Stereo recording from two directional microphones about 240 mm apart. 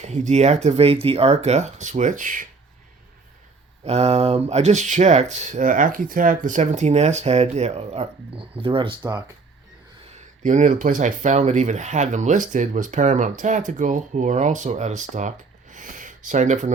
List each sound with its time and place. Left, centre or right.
0.0 s speech: right
3.8 s speech: right
10.4 s speech: right
15.7 s a sound: right